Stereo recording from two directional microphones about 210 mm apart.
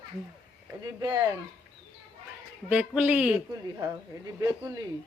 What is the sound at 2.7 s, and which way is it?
Speech, 5° right (ahead or behind).